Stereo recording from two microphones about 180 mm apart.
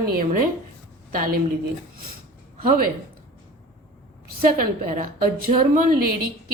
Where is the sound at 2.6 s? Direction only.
50° right (ahead or behind).